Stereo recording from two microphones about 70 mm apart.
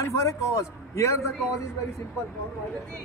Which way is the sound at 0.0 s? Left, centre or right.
Left.